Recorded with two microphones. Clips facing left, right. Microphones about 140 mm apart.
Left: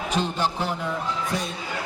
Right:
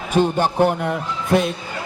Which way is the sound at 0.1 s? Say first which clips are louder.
Right 9 dB; 55° right (ahead or behind).